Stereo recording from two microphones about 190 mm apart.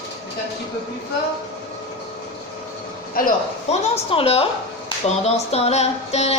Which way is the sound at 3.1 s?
40° left (ahead or behind).